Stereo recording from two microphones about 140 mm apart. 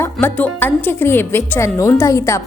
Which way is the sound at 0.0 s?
15° left (ahead or behind).